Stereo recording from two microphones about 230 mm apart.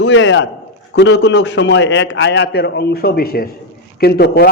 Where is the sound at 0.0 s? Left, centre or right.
Left.